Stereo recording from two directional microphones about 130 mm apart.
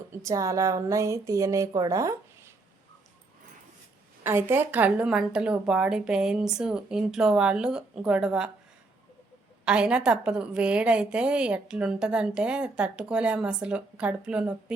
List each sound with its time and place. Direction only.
0.1 s speech: 25° right (ahead or behind)
4.2 s a woman's voice: 20° right (ahead or behind)
9.6 s a woman's voice: 10° right (ahead or behind)